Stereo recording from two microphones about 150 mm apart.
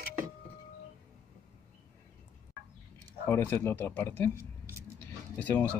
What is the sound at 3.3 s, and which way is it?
Speech, 15° left (ahead or behind).